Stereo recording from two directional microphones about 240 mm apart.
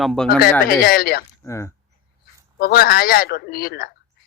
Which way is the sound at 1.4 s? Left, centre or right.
Centre.